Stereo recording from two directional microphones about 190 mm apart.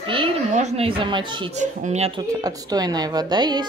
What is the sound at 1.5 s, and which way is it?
Speech, 35° right (ahead or behind).